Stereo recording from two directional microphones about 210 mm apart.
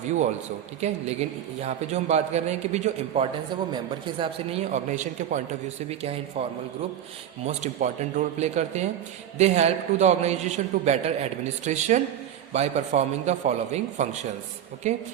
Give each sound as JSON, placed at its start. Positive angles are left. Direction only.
{"t": 0.8, "sound": "a man's voice", "side_deg": -30}
{"t": 7.4, "sound": "a man's voice", "side_deg": -35}